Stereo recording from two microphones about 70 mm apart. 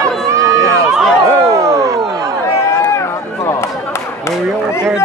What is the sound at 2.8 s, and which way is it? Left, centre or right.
Run, left.